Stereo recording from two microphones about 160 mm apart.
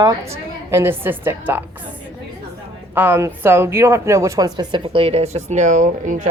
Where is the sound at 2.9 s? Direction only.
15° right (ahead or behind).